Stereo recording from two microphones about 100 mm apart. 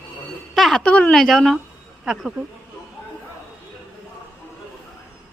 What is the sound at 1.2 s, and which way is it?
Speech, centre (ahead or behind).